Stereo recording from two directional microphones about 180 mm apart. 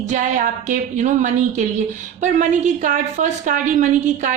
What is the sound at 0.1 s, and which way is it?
A woman's voice, 45° right (ahead or behind).